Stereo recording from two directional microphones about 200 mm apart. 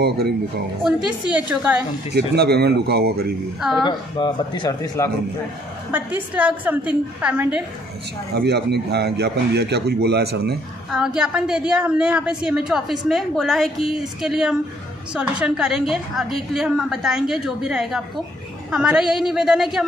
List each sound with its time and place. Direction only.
0.8 s a woman's voice: 5° right (ahead or behind)
2.1 s speech: 55° right (ahead or behind)
3.8 s speech: 20° left (ahead or behind)
5.9 s a woman's voice: 10° right (ahead or behind)
8.4 s a man's voice: 55° right (ahead or behind)
10.9 s a woman's voice: 5° right (ahead or behind)